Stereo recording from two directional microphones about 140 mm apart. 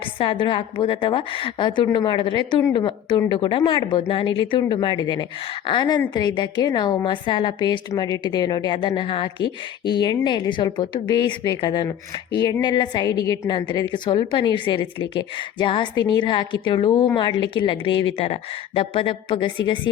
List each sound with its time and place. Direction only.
0.2 s a woman's voice: 35° left (ahead or behind)